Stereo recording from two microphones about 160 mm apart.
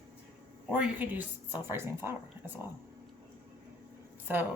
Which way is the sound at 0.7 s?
10° right (ahead or behind).